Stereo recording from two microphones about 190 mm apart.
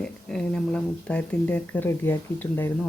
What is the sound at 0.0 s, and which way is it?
Speech, 5° left (ahead or behind).